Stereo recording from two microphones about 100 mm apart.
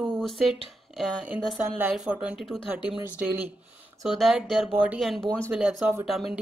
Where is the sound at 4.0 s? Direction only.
Centre (ahead or behind).